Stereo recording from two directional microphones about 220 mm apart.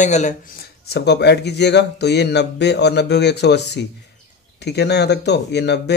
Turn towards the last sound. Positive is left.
turn(degrees=50)  # may be behind; listen again after turning